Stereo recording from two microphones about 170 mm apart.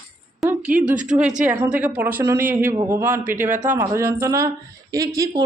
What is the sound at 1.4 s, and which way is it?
A woman's voice, 10° right (ahead or behind).